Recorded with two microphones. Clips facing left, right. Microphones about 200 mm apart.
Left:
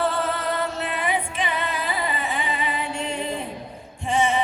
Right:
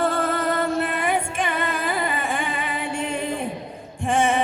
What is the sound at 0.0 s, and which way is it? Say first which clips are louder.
Music: right 2 dB; 50° right (ahead or behind).